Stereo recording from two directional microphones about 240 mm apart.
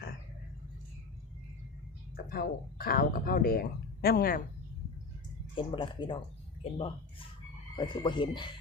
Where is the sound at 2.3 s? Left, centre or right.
Left.